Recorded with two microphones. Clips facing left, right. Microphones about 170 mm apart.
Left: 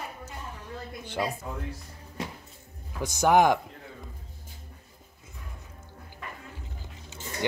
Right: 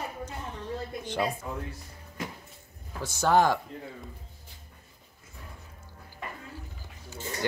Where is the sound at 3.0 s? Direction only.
15° left (ahead or behind).